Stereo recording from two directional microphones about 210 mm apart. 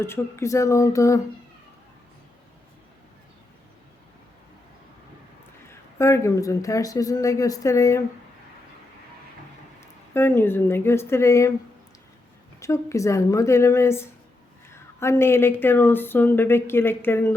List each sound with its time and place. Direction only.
0.0 s a woman's voice: 10° left (ahead or behind)
5.6 s a woman's voice: 15° left (ahead or behind)
9.8 s speech: 10° left (ahead or behind)
12.5 s a woman's voice: 15° left (ahead or behind)